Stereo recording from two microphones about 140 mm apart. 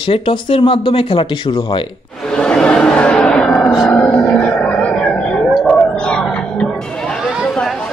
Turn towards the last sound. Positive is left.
turn(degrees=5)  # may be behind; listen again after turning